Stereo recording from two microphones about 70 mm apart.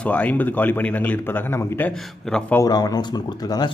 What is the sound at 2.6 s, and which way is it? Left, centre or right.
Speech, left.